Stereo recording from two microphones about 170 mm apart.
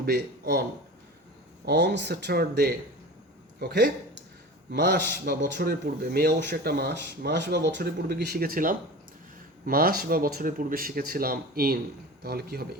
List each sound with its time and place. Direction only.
0.0 s speech: 70° right (ahead or behind)
1.6 s speech: 85° right
4.7 s a man's voice: 80° right